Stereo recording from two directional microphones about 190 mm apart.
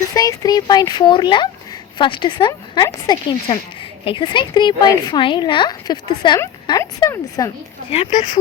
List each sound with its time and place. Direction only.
0.1 s a woman's voice: 20° left (ahead or behind)